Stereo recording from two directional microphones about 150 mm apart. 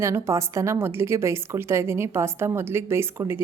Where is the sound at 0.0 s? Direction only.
20° right (ahead or behind).